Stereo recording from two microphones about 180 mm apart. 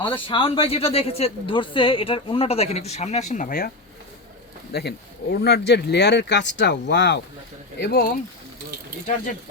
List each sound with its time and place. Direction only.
0.1 s speech: 30° left (ahead or behind); by 3.7 s 50° left (ahead or behind)
4.7 s speech: 65° left (ahead or behind)
7.8 s speech: 60° left (ahead or behind)